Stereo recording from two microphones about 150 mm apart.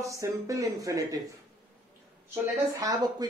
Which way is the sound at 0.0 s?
20° right (ahead or behind).